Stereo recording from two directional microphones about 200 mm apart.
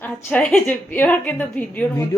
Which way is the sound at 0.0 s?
5° left (ahead or behind).